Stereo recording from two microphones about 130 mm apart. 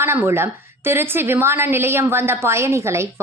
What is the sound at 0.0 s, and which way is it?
A woman's voice, 20° right (ahead or behind).